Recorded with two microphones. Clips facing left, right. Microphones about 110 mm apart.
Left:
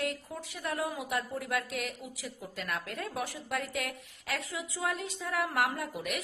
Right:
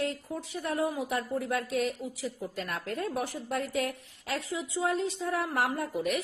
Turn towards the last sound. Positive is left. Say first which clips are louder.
# right 4 dB
turn(degrees=-35)  # may be behind; listen again after turning